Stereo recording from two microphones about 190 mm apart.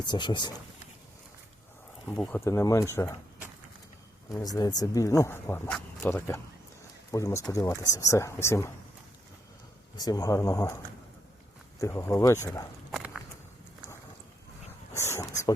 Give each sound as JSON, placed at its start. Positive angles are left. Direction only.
{"t": 0.0, "sound": "speech", "side_deg": 25}
{"t": 2.2, "sound": "speech", "side_deg": 15}
{"t": 4.3, "sound": "speech", "side_deg": 20}
{"t": 10.0, "sound": "speech", "side_deg": 20}
{"t": 11.8, "sound": "speech", "side_deg": 15}
{"t": 12.9, "sound": "walk", "side_deg": -5}
{"t": 14.9, "sound": "a sound", "side_deg": 15}